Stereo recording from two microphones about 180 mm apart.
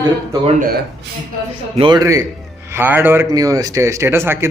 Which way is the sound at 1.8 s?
25° right (ahead or behind).